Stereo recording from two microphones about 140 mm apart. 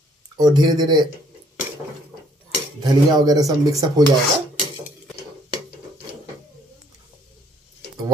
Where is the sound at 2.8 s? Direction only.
25° right (ahead or behind).